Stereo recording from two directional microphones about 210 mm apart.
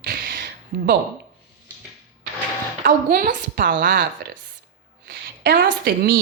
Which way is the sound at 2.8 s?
45° right (ahead or behind).